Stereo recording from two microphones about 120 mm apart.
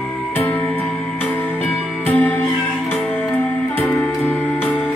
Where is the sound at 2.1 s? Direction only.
15° left (ahead or behind).